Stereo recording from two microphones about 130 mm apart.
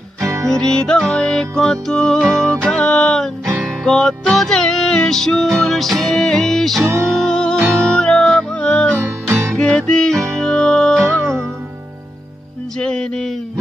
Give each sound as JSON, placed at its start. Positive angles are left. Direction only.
{"t": 0.5, "sound": "music", "side_deg": 5}
{"t": 9.0, "sound": "music", "side_deg": -20}
{"t": 9.6, "sound": "music", "side_deg": 5}
{"t": 12.7, "sound": "music", "side_deg": 5}